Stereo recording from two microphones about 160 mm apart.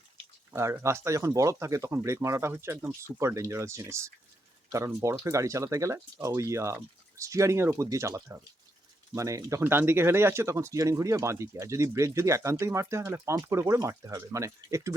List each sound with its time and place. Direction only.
0.5 s speech: 15° right (ahead or behind)